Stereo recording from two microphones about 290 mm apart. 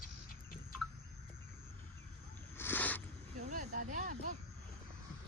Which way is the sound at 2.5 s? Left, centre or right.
Centre.